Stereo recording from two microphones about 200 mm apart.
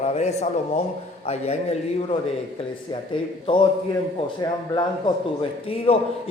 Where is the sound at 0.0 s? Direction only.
35° left (ahead or behind).